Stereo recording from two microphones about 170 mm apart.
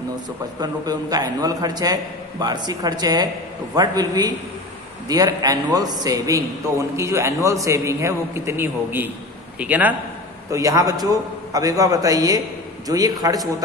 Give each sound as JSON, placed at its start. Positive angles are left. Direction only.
{"t": 0.6, "sound": "a man's voice", "side_deg": -25}
{"t": 10.5, "sound": "a man's voice", "side_deg": -20}